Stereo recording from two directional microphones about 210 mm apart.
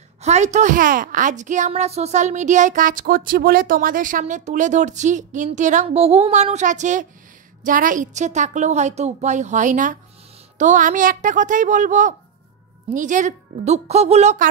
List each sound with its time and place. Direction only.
0.2 s a woman's voice: 35° right (ahead or behind)